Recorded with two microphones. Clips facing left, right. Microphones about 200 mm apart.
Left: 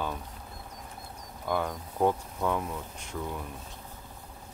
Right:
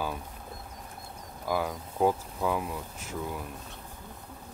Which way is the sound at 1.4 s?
5° right (ahead or behind).